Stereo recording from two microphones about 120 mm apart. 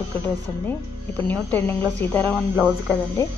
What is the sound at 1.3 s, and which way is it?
A woman's voice, 15° left (ahead or behind).